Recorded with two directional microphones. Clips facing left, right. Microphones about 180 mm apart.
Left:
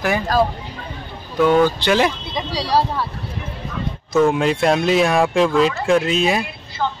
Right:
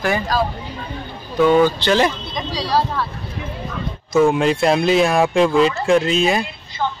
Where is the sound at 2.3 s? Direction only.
35° left (ahead or behind).